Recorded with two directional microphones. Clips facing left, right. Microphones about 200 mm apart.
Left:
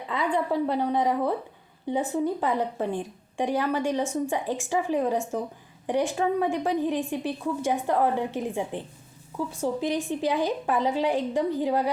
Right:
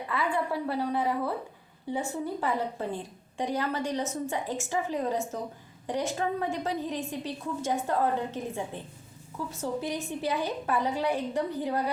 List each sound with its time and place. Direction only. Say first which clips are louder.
0.1 s a woman's voice: left 4 dB; 20° left (ahead or behind)